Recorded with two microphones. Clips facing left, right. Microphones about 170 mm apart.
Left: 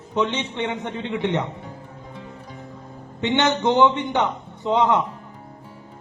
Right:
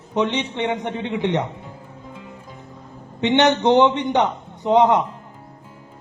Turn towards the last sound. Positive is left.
turn(degrees=-15)  # may be behind; listen again after turning